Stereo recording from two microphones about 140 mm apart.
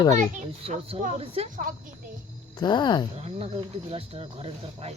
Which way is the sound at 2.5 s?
30° left (ahead or behind).